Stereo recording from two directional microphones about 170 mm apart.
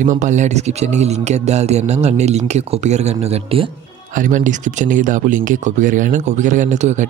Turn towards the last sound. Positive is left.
turn(degrees=-45)  # may be behind; listen again after turning